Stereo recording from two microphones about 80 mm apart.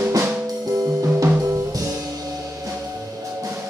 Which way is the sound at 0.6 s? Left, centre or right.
Right.